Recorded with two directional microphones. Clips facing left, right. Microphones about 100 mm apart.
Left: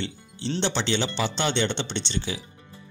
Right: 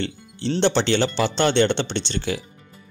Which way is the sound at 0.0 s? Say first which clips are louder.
Right 5 dB; 55° right (ahead or behind).